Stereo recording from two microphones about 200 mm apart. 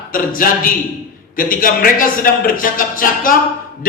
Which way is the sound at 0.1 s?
45° left (ahead or behind).